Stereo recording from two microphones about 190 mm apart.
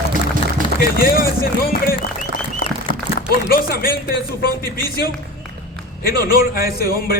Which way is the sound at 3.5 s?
50° left (ahead or behind).